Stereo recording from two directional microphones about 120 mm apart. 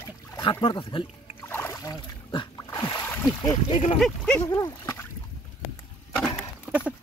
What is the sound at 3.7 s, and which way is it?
Speech, 55° left (ahead or behind).